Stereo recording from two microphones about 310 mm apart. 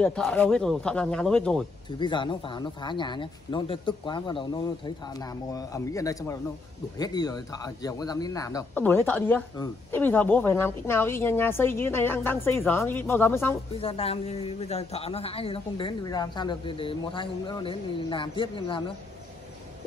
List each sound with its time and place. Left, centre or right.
0.0 s speech: centre
2.0 s speech: centre
13.7 s speech: centre